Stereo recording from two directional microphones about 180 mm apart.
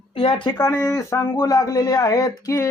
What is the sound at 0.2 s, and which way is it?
Speech, 30° left (ahead or behind).